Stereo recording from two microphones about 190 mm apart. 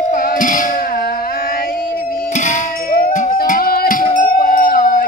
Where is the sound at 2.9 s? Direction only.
50° left (ahead or behind).